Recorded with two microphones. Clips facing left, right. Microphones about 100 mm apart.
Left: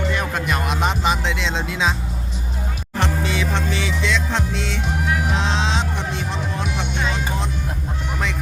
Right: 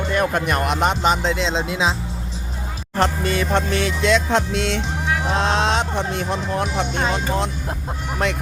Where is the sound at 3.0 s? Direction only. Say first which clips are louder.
Right 3 dB; 50° right (ahead or behind).